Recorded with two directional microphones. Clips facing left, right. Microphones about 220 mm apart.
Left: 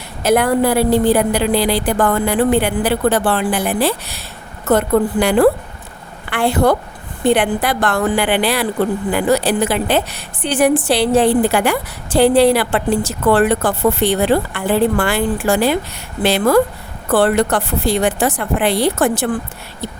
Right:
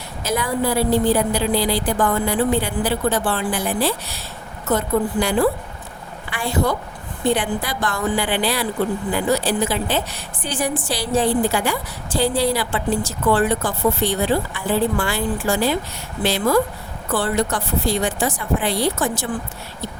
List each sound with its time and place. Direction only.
0.2 s a woman's voice: 60° left (ahead or behind)